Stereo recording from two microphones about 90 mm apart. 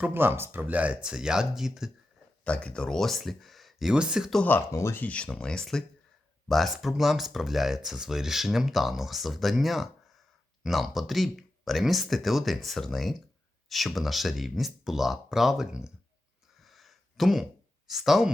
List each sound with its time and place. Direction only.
0.0 s speech: 25° right (ahead or behind); by 1.9 s 5° right (ahead or behind)
2.4 s speech: 15° left (ahead or behind); by 4.3 s 10° right (ahead or behind)
4.4 s speech: 25° left (ahead or behind)
5.0 s speech: 10° left (ahead or behind); by 15.9 s 5° right (ahead or behind)
16.6 s a sound: centre (ahead or behind)
17.8 s speech: 5° right (ahead or behind)